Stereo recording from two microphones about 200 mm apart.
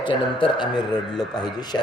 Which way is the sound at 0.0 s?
25° left (ahead or behind).